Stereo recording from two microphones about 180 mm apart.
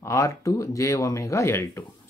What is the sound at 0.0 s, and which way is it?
Speech, 15° left (ahead or behind).